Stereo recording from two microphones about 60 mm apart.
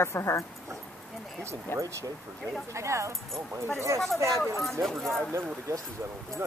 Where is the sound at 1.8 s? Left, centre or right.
Right.